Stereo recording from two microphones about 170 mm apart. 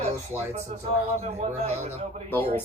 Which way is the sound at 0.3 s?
15° right (ahead or behind).